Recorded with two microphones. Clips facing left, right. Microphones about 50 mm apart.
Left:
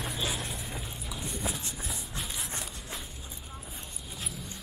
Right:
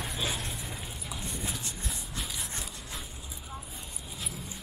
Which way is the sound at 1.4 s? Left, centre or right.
Centre.